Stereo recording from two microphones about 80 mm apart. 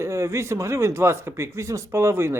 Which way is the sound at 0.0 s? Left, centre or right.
Right.